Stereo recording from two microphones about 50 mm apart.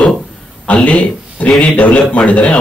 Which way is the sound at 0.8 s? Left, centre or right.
Left.